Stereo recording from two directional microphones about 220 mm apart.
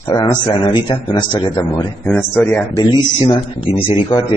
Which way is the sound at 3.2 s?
25° left (ahead or behind).